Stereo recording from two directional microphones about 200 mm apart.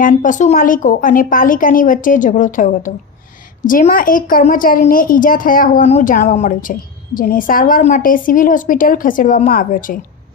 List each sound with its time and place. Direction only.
0.0 s a woman's voice: 40° left (ahead or behind)